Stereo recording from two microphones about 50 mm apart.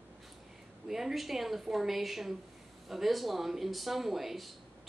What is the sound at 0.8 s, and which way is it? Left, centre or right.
Speech, centre.